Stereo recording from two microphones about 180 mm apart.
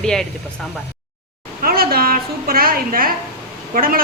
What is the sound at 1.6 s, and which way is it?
A woman's voice, 55° right (ahead or behind).